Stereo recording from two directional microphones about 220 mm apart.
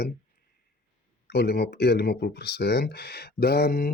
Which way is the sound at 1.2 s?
50° left (ahead or behind).